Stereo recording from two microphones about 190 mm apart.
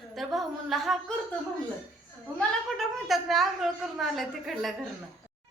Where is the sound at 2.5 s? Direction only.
Centre (ahead or behind).